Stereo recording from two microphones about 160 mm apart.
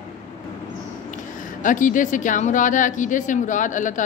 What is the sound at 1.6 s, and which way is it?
Speech, 55° left (ahead or behind).